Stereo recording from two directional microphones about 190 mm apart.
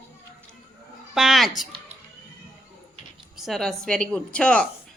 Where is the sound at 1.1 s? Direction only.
Centre (ahead or behind).